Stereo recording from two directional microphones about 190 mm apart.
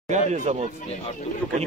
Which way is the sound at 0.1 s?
35° right (ahead or behind).